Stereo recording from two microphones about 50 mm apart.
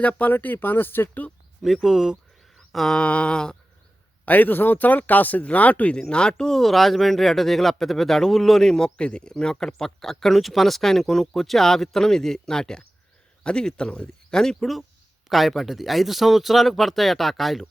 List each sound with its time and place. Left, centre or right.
0.0 s speech: left
1.6 s speech: centre
2.7 s speech: centre
3.0 s a sound: left
4.3 s speech: left
5.9 s speech: centre
6.6 s speech: centre